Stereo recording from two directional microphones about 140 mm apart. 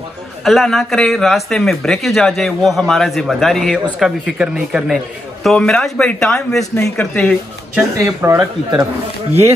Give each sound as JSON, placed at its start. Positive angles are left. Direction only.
{"t": 0.4, "sound": "speech", "side_deg": 0}
{"t": 7.7, "sound": "speech", "side_deg": -15}